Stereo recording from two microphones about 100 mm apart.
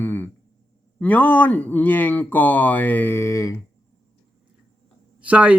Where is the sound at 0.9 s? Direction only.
15° left (ahead or behind); by 3.5 s 30° left (ahead or behind).